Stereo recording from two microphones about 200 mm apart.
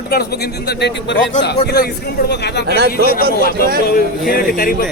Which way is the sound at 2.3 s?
55° left (ahead or behind).